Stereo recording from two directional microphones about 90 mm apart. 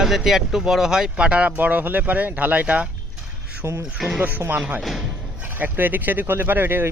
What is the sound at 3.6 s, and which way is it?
Speech, 30° right (ahead or behind).